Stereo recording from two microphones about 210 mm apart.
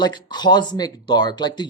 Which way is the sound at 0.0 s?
20° left (ahead or behind).